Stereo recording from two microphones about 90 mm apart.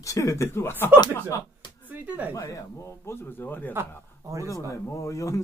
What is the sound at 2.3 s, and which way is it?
A man's voice, 35° left (ahead or behind).